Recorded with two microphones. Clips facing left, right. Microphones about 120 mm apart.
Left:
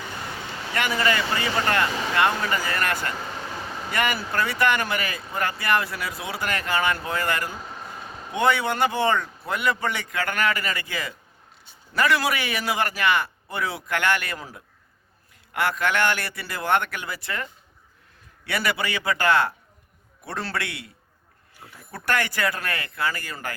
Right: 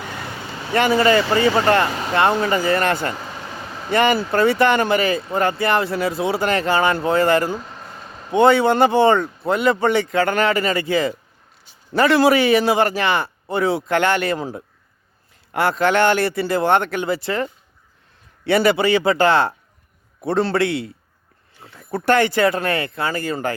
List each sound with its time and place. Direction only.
0.7 s speech: 30° right (ahead or behind)
7.6 s a sound: 5° left (ahead or behind)
8.3 s speech: 30° right (ahead or behind)
21.9 s speech: 25° right (ahead or behind)